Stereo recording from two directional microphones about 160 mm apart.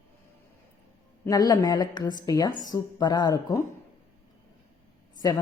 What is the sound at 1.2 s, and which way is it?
A woman's voice, 25° left (ahead or behind).